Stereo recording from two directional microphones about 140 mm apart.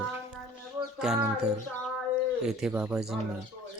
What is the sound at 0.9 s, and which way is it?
Music, 5° right (ahead or behind).